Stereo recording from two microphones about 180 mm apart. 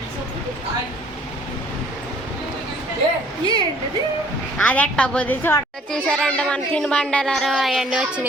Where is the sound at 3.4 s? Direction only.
25° right (ahead or behind).